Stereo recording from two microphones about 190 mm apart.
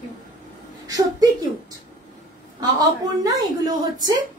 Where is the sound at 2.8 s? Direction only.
20° right (ahead or behind).